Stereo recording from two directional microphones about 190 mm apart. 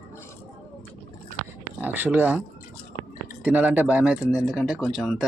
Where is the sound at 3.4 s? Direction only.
10° right (ahead or behind).